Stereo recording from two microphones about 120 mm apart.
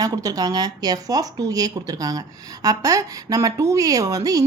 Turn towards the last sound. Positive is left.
turn(degrees=-30)  # may be behind; listen again after turning